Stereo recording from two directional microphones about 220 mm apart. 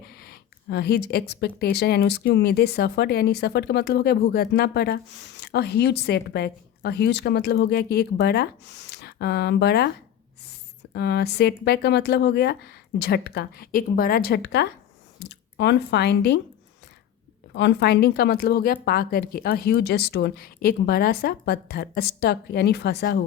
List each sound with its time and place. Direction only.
0.1 s speech: 45° left (ahead or behind)
17.5 s speech: 50° left (ahead or behind)